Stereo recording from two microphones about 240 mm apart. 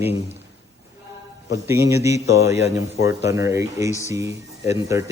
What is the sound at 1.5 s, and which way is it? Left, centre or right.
A man's voice, centre.